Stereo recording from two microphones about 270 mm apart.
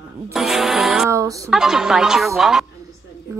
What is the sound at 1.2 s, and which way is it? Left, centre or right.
Speech, centre.